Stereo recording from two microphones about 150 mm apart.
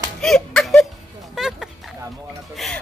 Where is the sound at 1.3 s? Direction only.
Centre (ahead or behind).